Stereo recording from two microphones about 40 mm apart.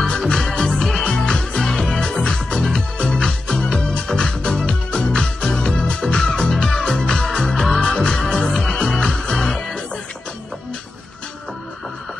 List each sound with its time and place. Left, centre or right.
0.4 s music: centre
1.0 s music: left